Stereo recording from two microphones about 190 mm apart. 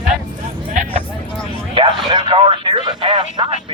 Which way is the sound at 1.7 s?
25° right (ahead or behind).